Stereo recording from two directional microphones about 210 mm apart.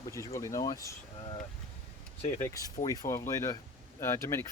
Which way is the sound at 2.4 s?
15° left (ahead or behind).